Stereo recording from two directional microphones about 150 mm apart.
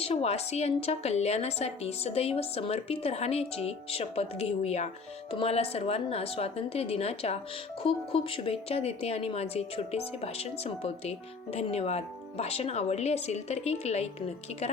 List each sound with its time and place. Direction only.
0.0 s a woman's voice: 45° left (ahead or behind)